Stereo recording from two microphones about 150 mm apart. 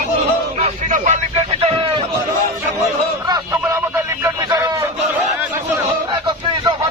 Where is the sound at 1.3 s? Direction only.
40° right (ahead or behind).